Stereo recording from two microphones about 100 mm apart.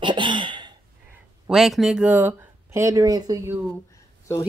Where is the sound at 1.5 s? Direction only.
Centre (ahead or behind); by 3.4 s 40° right (ahead or behind).